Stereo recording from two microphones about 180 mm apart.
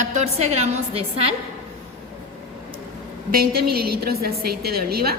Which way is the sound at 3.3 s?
55° right (ahead or behind).